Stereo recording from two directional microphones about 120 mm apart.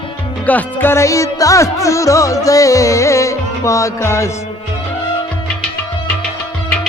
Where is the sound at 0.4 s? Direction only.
15° left (ahead or behind).